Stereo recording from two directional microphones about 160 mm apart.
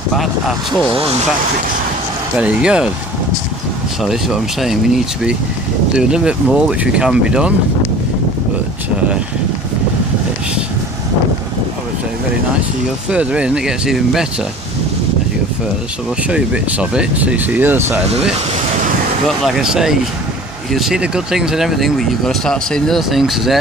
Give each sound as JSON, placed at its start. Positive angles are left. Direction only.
{"t": 0.1, "sound": "speech", "side_deg": 0}
{"t": 2.3, "sound": "speech", "side_deg": -5}
{"t": 4.0, "sound": "speech", "side_deg": 0}
{"t": 13.1, "sound": "speech", "side_deg": -5}
{"t": 16.3, "sound": "speech", "side_deg": -5}
{"t": 19.2, "sound": "speech", "side_deg": 0}